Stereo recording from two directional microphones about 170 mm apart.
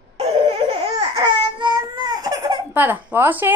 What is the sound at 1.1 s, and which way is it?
Baby cry, 25° right (ahead or behind).